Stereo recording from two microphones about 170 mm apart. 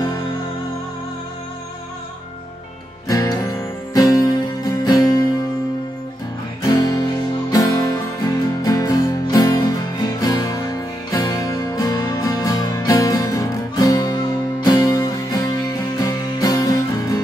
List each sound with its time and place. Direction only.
3.1 s music: 20° left (ahead or behind)
6.6 s guitar: 20° left (ahead or behind)
8.6 s music: 20° left (ahead or behind)